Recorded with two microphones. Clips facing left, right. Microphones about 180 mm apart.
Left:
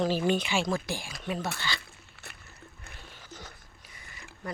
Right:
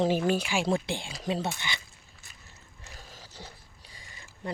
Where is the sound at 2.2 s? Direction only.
75° left (ahead or behind).